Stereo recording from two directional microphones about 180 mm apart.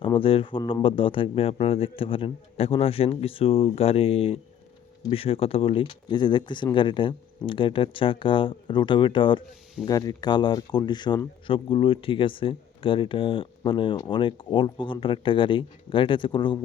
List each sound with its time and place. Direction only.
0.0 s speech: 30° left (ahead or behind)